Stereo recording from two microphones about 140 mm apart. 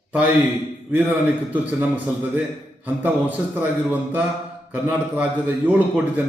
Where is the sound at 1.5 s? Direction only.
10° right (ahead or behind).